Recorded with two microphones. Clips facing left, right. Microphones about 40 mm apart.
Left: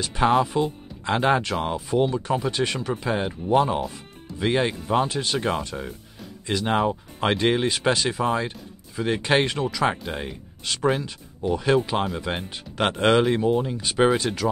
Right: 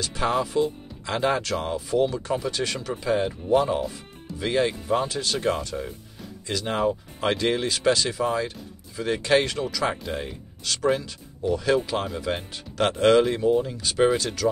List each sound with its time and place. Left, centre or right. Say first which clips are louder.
0.0 s speech: left 4 dB; centre